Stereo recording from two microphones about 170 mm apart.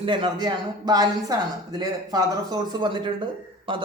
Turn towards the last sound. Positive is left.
turn(degrees=-30)  # may be behind; listen again after turning